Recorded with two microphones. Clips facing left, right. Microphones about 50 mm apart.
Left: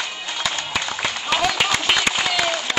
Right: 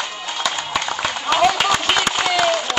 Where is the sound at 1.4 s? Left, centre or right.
Centre.